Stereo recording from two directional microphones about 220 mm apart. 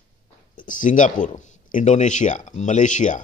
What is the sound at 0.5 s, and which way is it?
Speech, 35° left (ahead or behind).